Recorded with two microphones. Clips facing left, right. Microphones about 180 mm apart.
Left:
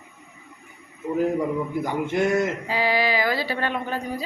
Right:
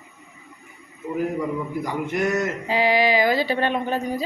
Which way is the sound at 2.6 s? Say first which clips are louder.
Right 3 dB; 20° right (ahead or behind).